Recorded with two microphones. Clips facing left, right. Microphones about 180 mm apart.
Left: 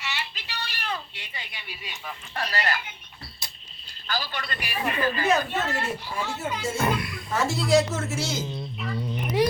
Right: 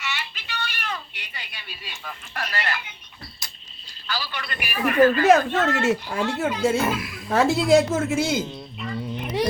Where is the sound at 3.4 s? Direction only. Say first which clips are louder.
Left 1 dB; 30° left (ahead or behind).